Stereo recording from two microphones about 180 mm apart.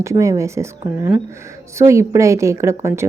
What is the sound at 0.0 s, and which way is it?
Speech, 15° right (ahead or behind).